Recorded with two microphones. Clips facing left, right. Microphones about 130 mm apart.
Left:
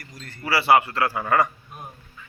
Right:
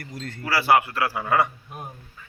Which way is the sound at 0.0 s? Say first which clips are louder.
Right 7 dB; 70° right (ahead or behind).